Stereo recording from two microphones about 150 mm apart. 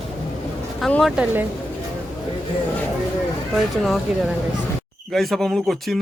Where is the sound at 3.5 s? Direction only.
Centre (ahead or behind).